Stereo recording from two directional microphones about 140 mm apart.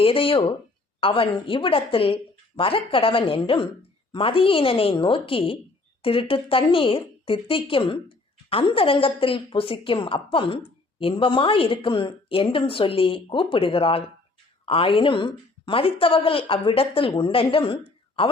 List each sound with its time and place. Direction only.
0.0 s a woman's voice: 40° left (ahead or behind)